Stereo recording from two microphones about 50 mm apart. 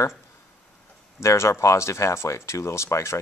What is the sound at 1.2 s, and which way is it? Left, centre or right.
A man's voice, left.